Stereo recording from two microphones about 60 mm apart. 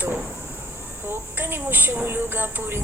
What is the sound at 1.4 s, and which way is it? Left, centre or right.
A woman's voice, right.